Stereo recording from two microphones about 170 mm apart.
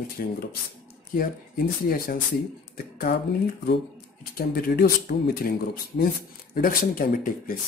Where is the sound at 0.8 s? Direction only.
55° left (ahead or behind).